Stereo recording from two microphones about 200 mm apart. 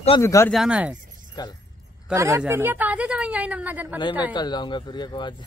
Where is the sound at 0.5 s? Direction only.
5° right (ahead or behind).